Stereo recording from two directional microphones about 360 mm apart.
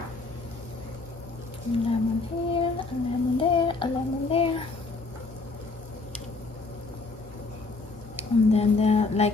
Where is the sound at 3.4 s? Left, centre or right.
Centre.